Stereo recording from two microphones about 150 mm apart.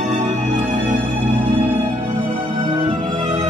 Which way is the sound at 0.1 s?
55° right (ahead or behind).